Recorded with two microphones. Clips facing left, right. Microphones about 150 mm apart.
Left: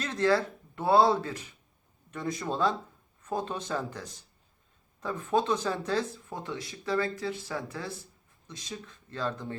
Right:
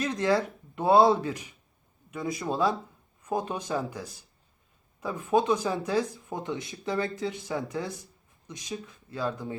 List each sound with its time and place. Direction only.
0.0 s speech: 15° right (ahead or behind)